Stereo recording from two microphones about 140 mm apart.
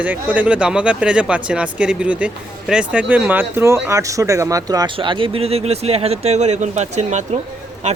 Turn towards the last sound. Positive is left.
turn(degrees=-55)  # may be behind; listen again after turning